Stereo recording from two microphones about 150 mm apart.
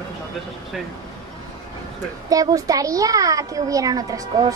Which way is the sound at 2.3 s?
25° right (ahead or behind).